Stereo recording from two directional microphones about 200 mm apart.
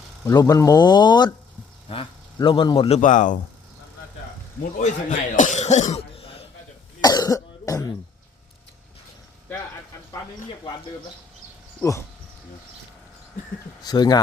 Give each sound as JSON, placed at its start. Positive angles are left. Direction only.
{"t": 0.3, "sound": "a man's voice", "side_deg": 15}
{"t": 3.0, "sound": "speech", "side_deg": 40}
{"t": 4.8, "sound": "speech", "side_deg": 35}
{"t": 7.0, "sound": "cough", "side_deg": 20}
{"t": 9.5, "sound": "a sound", "side_deg": 10}
{"t": 11.8, "sound": "speech", "side_deg": 15}
{"t": 13.8, "sound": "speech", "side_deg": 20}